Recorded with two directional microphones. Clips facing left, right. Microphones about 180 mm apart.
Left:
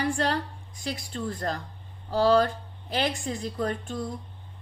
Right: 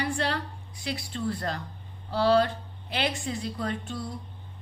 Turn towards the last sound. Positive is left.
turn(degrees=45)  # may be behind; listen again after turning